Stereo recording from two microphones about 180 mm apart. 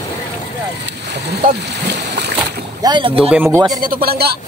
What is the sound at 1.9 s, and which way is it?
Splash, 70° right (ahead or behind).